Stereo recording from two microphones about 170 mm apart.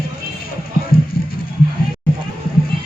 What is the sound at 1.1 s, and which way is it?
Music, 60° left (ahead or behind).